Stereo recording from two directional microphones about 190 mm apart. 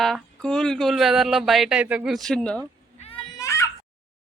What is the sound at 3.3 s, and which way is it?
Baby cry, 15° left (ahead or behind).